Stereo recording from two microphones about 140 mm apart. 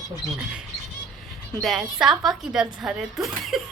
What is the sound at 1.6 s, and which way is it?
Speech, centre (ahead or behind).